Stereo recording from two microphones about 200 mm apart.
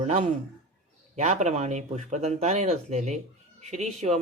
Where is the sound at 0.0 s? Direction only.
35° right (ahead or behind).